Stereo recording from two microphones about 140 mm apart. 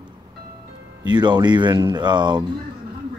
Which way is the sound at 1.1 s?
30° right (ahead or behind).